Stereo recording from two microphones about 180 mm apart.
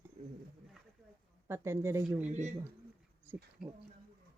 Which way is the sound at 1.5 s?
15° right (ahead or behind).